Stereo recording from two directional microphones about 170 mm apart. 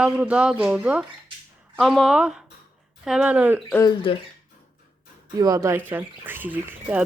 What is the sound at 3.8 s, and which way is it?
Speech, 25° left (ahead or behind).